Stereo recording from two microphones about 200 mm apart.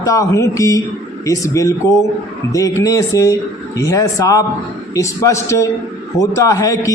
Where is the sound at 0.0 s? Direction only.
15° left (ahead or behind).